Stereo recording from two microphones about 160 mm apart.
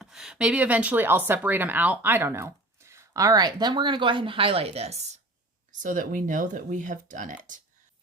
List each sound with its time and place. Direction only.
0.0 s speech: 5° right (ahead or behind); by 5.0 s 40° right (ahead or behind)
5.8 s speech: 55° right (ahead or behind)